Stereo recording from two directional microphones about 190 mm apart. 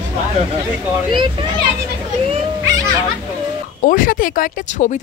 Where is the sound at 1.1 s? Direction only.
25° right (ahead or behind).